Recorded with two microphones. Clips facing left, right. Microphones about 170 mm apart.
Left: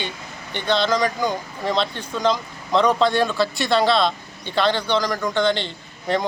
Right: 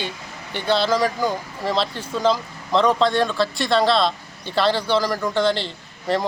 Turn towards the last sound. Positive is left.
turn(degrees=0)  # may be behind; listen again after turning